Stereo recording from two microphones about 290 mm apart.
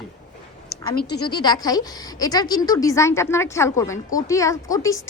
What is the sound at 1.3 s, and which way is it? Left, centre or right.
A woman's voice, centre.